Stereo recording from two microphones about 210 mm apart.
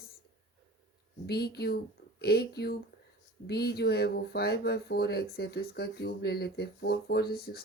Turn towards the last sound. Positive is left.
turn(degrees=45)  # may be behind; listen again after turning